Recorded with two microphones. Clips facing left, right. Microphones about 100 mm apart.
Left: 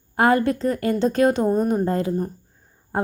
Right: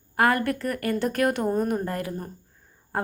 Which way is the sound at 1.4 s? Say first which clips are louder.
Left 4 dB; 10° left (ahead or behind).